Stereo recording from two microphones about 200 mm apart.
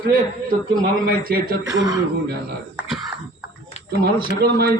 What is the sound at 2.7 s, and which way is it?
Throat clearing, 5° right (ahead or behind).